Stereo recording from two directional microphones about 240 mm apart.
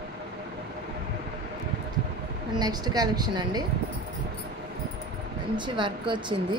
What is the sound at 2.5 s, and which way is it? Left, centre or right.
A woman's voice, centre.